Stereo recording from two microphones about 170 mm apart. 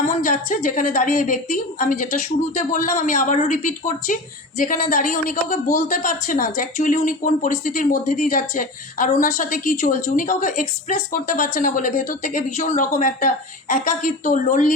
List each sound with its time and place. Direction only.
0.2 s speech: 50° left (ahead or behind)